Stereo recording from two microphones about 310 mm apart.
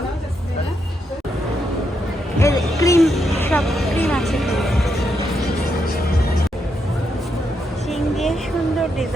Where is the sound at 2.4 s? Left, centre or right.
Centre.